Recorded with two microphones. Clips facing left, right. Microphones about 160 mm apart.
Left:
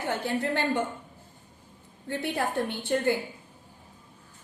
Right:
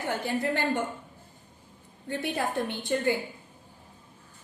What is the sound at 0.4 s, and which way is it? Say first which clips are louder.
Speech: even; 15° right (ahead or behind).